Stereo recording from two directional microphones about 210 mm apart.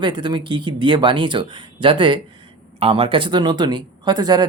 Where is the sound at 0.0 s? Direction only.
20° right (ahead or behind).